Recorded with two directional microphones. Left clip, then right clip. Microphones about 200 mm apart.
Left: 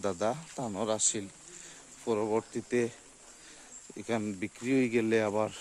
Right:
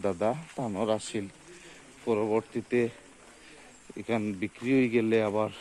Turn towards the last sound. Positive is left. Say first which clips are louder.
# right 2 dB
turn(degrees=15)  # may be behind; listen again after turning